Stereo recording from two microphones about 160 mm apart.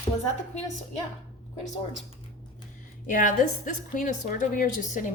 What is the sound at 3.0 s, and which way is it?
A woman's voice, 55° left (ahead or behind).